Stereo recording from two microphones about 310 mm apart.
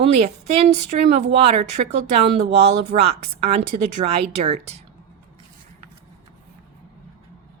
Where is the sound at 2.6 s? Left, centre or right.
Centre.